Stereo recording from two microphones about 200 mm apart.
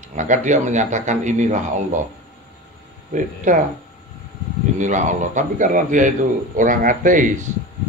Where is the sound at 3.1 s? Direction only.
40° right (ahead or behind).